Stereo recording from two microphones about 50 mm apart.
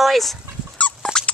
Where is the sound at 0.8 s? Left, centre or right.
Left.